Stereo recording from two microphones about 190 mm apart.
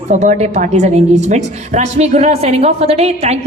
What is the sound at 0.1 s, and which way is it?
A woman's voice, 40° right (ahead or behind).